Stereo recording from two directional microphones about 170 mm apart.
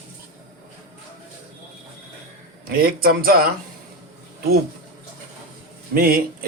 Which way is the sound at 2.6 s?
60° right (ahead or behind).